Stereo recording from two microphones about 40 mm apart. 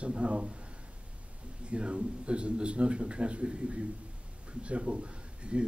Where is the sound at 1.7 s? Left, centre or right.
Right.